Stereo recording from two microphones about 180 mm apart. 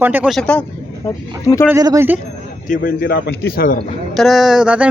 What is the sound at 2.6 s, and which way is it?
A man's voice, 50° left (ahead or behind).